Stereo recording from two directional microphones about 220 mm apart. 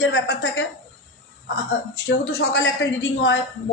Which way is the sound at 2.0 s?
50° left (ahead or behind).